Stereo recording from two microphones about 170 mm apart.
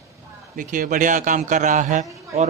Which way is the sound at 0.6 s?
50° right (ahead or behind).